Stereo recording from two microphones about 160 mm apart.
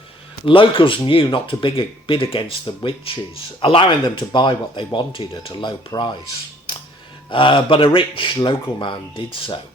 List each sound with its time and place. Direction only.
0.4 s speech: 35° left (ahead or behind)
7.3 s speech: 30° left (ahead or behind)